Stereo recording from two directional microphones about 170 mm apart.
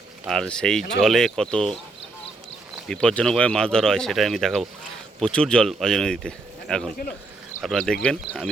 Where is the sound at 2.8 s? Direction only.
5° left (ahead or behind).